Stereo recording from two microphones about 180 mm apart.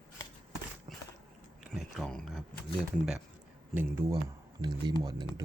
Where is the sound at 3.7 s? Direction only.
10° right (ahead or behind).